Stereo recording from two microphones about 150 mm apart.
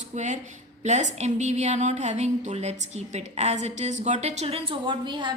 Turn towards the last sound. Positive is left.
turn(degrees=-30)  # may be behind; listen again after turning